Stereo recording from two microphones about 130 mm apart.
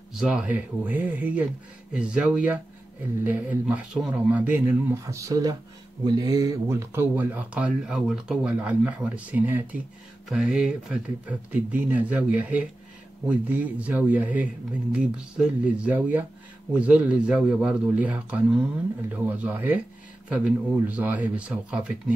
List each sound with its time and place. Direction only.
0.1 s speech: 5° right (ahead or behind)
5.0 s speech: 25° right (ahead or behind); by 22.1 s 10° right (ahead or behind)